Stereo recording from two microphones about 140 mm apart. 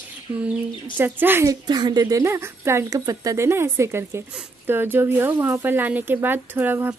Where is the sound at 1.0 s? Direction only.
15° right (ahead or behind).